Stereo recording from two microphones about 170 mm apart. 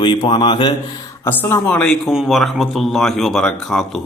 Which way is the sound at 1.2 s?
10° left (ahead or behind).